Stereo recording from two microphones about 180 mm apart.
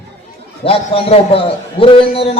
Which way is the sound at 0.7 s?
30° left (ahead or behind).